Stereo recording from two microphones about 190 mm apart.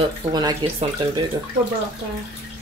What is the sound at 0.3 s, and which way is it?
Speech, 20° right (ahead or behind).